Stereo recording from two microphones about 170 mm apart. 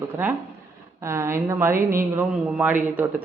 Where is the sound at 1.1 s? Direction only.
15° right (ahead or behind).